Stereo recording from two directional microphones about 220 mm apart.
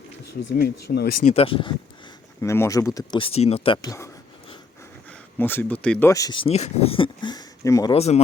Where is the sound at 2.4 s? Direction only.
10° left (ahead or behind).